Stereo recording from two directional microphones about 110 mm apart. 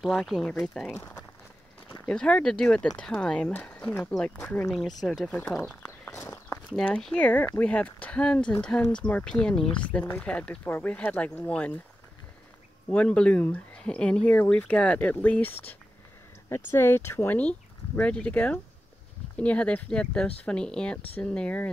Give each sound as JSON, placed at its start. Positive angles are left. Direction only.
{"t": 0.0, "sound": "speech", "side_deg": 0}
{"t": 2.0, "sound": "speech", "side_deg": 10}
{"t": 6.1, "sound": "walk", "side_deg": 25}
{"t": 6.8, "sound": "speech", "side_deg": 10}
{"t": 12.9, "sound": "speech", "side_deg": 10}